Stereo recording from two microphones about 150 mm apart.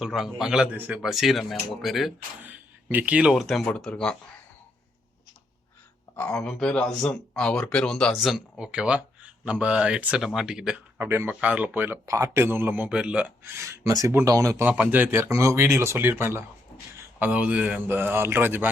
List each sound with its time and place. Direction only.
0.0 s speech: centre (ahead or behind)
2.4 s speech: 10° right (ahead or behind); by 4.2 s 5° left (ahead or behind)
6.1 s speech: 5° left (ahead or behind)
13.6 s speech: 20° right (ahead or behind)
14.7 s speech: 10° right (ahead or behind)